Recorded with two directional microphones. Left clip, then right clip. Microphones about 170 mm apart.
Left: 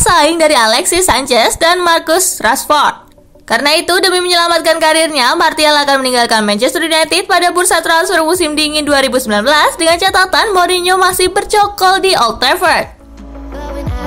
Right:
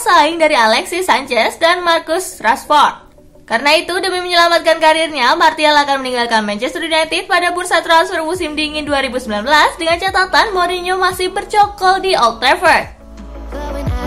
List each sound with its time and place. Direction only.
0.0 s speech: 35° left (ahead or behind)